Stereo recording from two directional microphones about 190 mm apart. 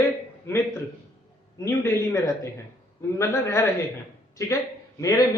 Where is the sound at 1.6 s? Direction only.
15° left (ahead or behind).